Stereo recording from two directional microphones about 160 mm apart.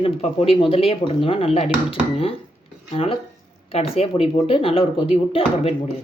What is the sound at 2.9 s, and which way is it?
Speech, 35° left (ahead or behind).